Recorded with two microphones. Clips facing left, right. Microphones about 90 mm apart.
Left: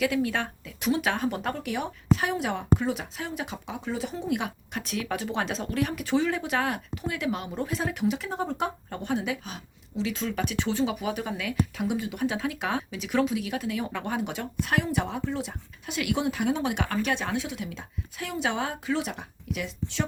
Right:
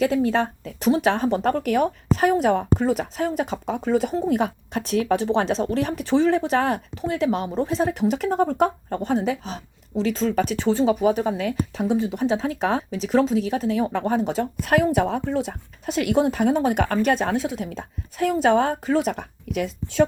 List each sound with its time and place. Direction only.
0.0 s speech: 35° right (ahead or behind)
1.5 s speech: 50° right (ahead or behind)
14.6 s speech: 50° right (ahead or behind)